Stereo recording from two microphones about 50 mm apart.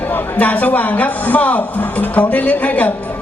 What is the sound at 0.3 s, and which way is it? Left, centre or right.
Speech, left.